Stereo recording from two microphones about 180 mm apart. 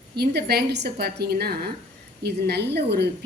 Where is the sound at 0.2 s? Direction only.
60° right (ahead or behind).